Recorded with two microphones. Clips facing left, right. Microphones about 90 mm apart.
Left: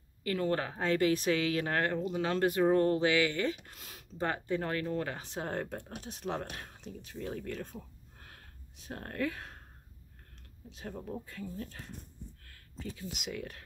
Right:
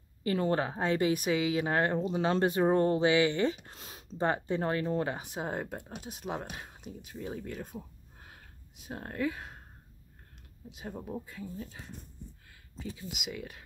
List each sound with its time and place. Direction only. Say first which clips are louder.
0.2 s speech: right 3 dB; 25° right (ahead or behind)
10.7 s speech: right 1 dB; 10° right (ahead or behind)